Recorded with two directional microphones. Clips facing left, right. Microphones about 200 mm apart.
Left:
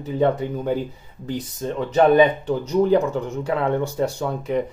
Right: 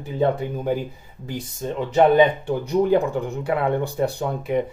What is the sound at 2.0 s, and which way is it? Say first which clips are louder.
Speech: even; 15° right (ahead or behind).